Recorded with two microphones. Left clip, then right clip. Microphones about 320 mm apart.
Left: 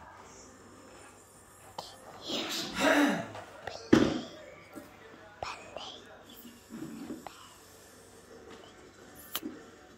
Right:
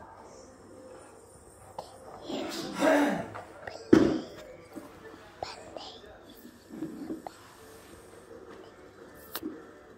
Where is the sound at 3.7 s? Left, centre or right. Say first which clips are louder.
Right 3 dB; left.